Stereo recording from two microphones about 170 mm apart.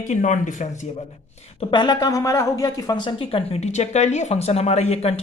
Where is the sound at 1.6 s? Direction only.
25° left (ahead or behind).